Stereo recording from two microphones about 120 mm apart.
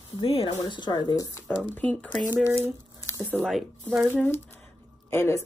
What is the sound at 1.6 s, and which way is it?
Speech, 15° left (ahead or behind).